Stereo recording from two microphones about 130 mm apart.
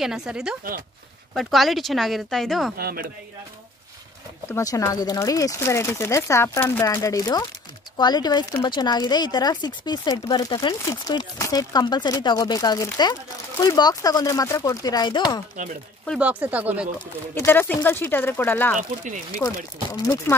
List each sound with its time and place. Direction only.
0.0 s speech: 5° right (ahead or behind)
4.5 s speech: 25° left (ahead or behind)
16.2 s speech: 10° right (ahead or behind)
17.4 s speech: 15° left (ahead or behind)
18.8 s speech: 80° right
19.3 s speech: 25° left (ahead or behind)